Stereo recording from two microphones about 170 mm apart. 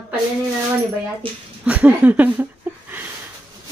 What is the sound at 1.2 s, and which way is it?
Speech, 30° right (ahead or behind).